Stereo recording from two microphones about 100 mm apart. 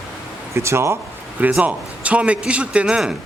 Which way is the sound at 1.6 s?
15° right (ahead or behind).